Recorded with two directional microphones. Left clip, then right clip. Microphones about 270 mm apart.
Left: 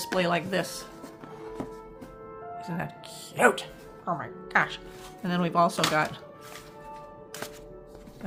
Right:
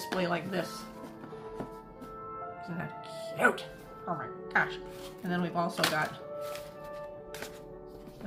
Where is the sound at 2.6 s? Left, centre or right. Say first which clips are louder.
Left 4 dB; left.